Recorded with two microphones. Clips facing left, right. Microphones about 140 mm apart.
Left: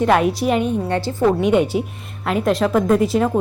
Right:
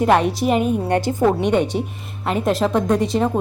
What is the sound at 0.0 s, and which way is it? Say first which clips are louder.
Speech: even; centre (ahead or behind).